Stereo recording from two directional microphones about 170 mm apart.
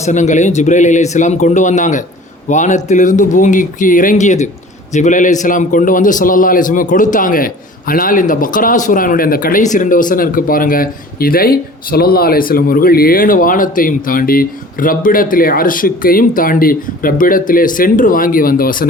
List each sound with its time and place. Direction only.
0.0 s a man's voice: 45° left (ahead or behind)